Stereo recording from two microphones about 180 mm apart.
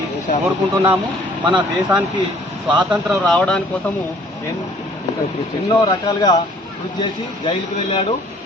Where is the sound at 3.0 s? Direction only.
5° left (ahead or behind).